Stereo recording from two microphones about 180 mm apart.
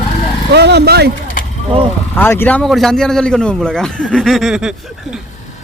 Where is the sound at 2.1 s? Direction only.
10° left (ahead or behind).